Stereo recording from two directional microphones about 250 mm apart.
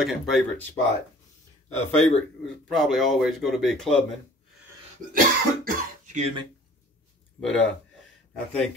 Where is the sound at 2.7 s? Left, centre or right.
Centre.